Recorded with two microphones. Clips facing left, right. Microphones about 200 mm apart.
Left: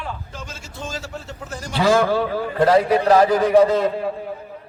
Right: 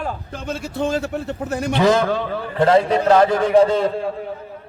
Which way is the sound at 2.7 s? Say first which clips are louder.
Right 1 dB; 25° right (ahead or behind).